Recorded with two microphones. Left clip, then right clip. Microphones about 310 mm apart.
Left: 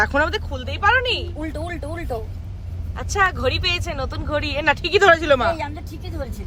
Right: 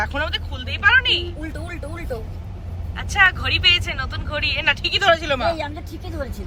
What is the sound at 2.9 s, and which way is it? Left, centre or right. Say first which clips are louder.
Speech: right 3 dB; centre.